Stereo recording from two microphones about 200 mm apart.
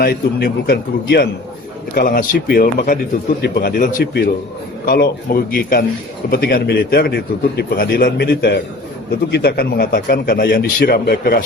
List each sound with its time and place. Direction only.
0.0 s a man's voice: 50° left (ahead or behind)